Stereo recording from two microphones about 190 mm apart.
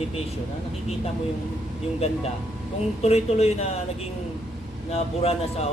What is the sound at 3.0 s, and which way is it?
Speech, 35° left (ahead or behind).